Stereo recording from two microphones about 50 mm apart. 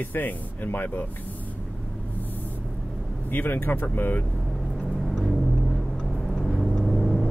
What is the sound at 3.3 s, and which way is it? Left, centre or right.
Speech, left.